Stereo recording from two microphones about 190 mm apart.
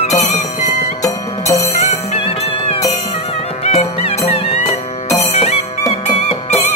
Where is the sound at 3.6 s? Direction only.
35° left (ahead or behind).